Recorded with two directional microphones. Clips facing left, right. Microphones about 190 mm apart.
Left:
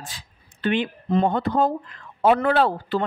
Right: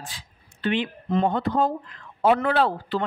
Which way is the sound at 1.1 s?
45° left (ahead or behind).